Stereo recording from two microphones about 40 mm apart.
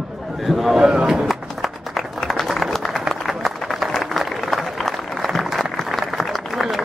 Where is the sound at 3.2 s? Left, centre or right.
Centre.